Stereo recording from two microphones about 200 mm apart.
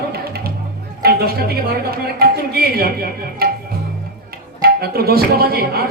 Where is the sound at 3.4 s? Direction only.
50° right (ahead or behind).